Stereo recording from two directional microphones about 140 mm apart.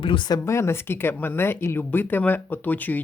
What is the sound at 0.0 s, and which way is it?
Speech, 35° left (ahead or behind).